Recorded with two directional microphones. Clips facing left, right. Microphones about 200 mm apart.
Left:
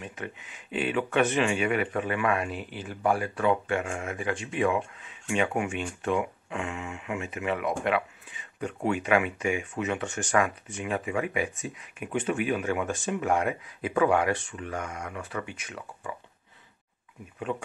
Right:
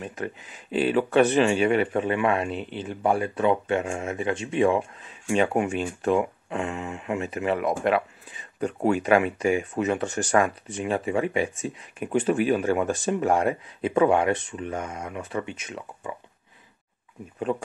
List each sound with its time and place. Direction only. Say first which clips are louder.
0.0 s speech: right 6 dB; 40° right (ahead or behind); by 16.2 s 25° right (ahead or behind)
17.5 s speech: right 5 dB; 35° right (ahead or behind)